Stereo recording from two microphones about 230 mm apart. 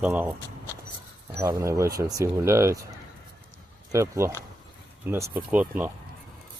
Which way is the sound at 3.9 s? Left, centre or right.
Centre.